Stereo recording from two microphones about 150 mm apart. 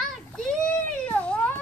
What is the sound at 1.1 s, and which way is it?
Cat, 10° left (ahead or behind).